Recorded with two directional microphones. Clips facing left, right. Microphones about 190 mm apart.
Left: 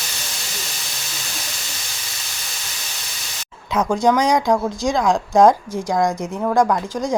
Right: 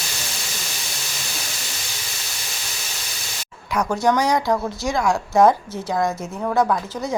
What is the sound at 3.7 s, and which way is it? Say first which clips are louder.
A woman's voice: left 2 dB; 20° left (ahead or behind).